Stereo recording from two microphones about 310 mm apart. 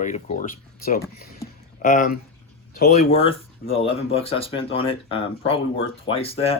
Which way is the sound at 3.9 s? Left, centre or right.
Centre.